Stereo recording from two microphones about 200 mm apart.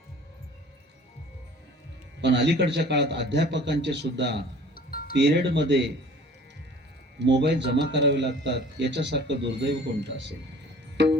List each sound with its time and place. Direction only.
2.2 s a man's voice: 60° right (ahead or behind)
4.7 s music: 50° left (ahead or behind)
5.1 s a man's voice: 60° right (ahead or behind)
7.2 s a man's voice: 60° right (ahead or behind)
10.9 s music: 60° right (ahead or behind)